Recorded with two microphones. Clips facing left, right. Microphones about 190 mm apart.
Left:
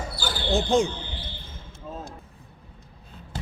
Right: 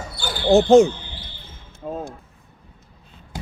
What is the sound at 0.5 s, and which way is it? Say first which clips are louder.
Speech: right 10 dB; 50° right (ahead or behind).